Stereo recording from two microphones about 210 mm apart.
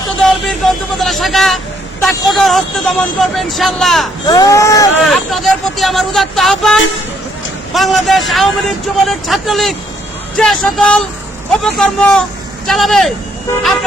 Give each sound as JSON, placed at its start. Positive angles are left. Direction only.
{"t": 0.2, "sound": "speech", "side_deg": 0}
{"t": 4.3, "sound": "speech", "side_deg": 15}
{"t": 5.0, "sound": "speech", "side_deg": 0}